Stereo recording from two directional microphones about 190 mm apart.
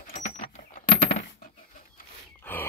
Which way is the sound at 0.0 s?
45° left (ahead or behind).